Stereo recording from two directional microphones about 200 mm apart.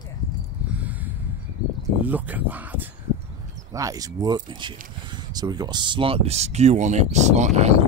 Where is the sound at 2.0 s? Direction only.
10° right (ahead or behind).